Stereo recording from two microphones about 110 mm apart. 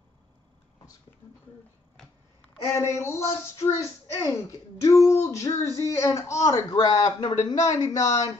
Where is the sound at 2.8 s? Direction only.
25° left (ahead or behind).